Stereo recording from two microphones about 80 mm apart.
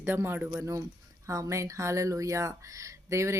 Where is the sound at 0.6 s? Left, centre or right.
Right.